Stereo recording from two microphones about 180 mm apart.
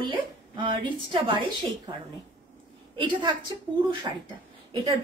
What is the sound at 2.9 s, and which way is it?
A woman's voice, 25° right (ahead or behind).